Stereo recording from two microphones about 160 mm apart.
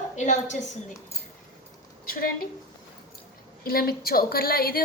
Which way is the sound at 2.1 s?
65° left (ahead or behind).